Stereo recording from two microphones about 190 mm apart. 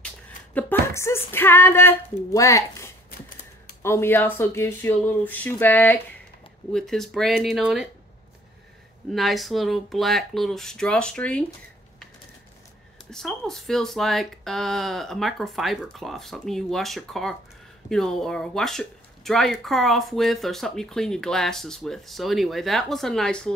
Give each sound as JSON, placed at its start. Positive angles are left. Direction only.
{"t": 0.6, "sound": "speech", "side_deg": 10}
{"t": 9.1, "sound": "speech", "side_deg": 0}
{"t": 13.1, "sound": "speech", "side_deg": 0}